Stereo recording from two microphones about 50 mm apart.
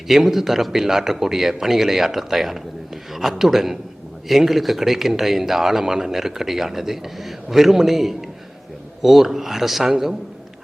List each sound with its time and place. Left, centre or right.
0.1 s a man's voice: centre